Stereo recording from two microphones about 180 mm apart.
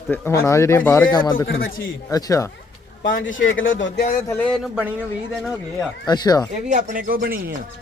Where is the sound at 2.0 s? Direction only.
20° left (ahead or behind).